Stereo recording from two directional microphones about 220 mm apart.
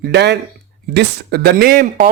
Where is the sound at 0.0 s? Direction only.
50° right (ahead or behind).